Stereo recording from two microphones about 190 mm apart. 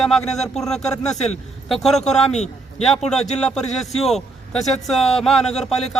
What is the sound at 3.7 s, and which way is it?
Speech, centre (ahead or behind).